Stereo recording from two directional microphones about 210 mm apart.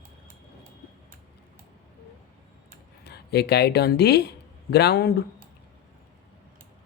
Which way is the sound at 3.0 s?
50° left (ahead or behind).